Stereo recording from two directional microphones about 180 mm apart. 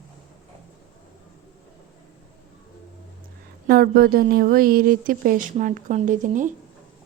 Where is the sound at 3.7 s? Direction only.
55° right (ahead or behind).